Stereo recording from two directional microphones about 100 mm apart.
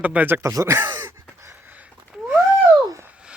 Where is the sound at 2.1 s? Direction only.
5° right (ahead or behind).